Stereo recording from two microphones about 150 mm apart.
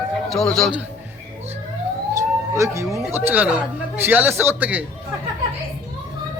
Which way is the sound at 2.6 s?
20° right (ahead or behind).